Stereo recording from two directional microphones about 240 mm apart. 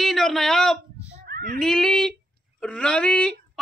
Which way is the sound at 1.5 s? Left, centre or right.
Centre.